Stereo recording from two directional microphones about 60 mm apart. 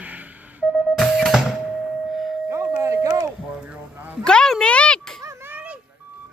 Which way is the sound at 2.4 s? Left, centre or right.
Right.